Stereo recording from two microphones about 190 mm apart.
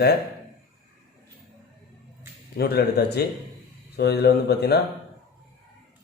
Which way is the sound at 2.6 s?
55° left (ahead or behind).